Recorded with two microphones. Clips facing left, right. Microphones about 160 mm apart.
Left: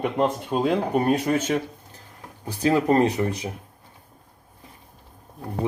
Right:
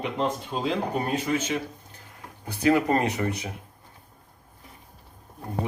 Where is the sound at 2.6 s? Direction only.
30° left (ahead or behind).